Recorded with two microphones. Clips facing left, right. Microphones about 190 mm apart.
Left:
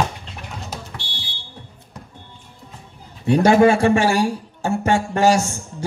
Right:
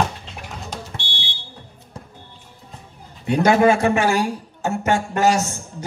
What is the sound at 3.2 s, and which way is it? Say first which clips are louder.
A man's voice: left 2 dB; 30° left (ahead or behind).